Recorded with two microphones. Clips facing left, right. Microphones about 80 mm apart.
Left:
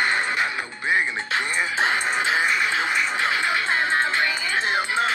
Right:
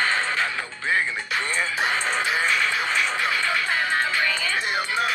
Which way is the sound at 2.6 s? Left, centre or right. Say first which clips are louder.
Left 1 dB; left.